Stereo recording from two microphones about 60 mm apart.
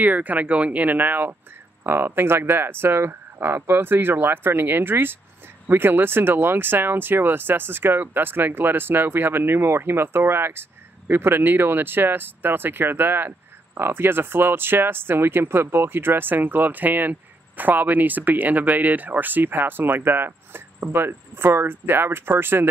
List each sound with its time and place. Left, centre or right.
0.0 s speech: right